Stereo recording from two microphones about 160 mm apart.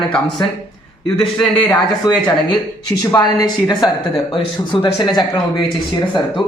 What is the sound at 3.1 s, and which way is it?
A man's voice, 25° left (ahead or behind).